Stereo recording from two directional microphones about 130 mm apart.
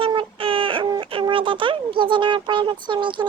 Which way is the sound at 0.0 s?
40° right (ahead or behind).